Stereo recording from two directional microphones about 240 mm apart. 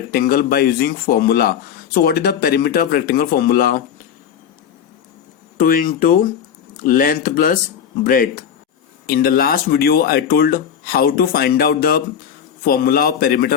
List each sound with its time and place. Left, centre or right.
0.1 s speech: left
5.5 s speech: left